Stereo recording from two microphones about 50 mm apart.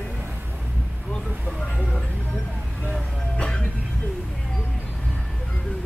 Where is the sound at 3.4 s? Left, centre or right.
Left.